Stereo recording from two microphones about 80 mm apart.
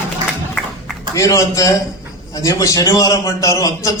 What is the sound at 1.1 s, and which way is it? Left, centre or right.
A man's voice, left.